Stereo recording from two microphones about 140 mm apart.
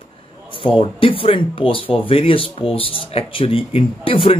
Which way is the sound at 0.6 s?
40° left (ahead or behind).